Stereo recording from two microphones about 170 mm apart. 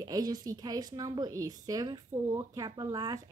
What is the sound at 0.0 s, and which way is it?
A child's voice, 20° right (ahead or behind).